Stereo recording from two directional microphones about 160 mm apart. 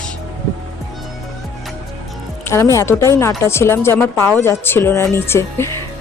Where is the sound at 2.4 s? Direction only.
20° left (ahead or behind).